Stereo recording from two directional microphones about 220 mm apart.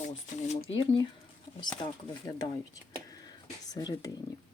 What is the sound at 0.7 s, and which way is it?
Speech, 25° left (ahead or behind).